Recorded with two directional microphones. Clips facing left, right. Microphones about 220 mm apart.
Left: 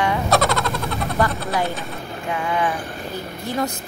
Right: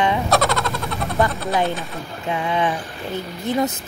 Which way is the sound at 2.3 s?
20° right (ahead or behind).